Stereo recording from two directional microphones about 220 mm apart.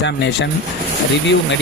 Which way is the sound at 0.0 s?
55° left (ahead or behind).